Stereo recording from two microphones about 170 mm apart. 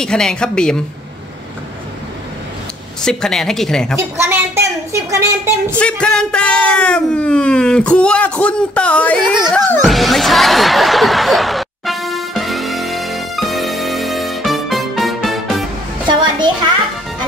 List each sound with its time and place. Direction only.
0.0 s speech: 5° left (ahead or behind)
3.1 s speech: 5° left (ahead or behind)
4.2 s speech: 15° right (ahead or behind)
5.8 s speech: 5° left (ahead or behind)
9.8 s snicker: centre (ahead or behind)
16.1 s music: 25° right (ahead or behind)